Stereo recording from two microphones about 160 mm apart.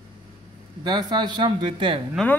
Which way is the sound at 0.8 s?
30° right (ahead or behind).